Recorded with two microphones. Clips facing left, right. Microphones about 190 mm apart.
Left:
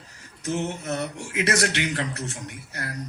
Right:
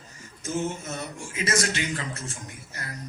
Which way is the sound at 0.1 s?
65° left (ahead or behind).